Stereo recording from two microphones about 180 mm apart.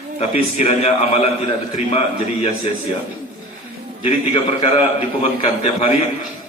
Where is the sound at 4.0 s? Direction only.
30° left (ahead or behind).